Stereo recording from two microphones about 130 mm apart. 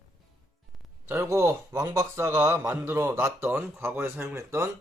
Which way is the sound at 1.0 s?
20° right (ahead or behind).